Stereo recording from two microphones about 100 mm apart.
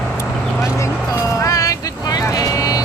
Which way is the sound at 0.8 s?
30° left (ahead or behind).